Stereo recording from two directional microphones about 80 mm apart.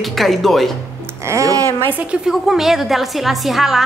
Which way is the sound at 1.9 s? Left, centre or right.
Centre.